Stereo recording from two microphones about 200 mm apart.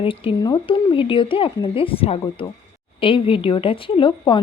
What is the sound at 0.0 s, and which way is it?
Speech, 30° left (ahead or behind).